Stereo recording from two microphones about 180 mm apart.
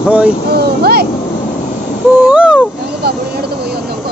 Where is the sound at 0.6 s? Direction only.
60° right (ahead or behind).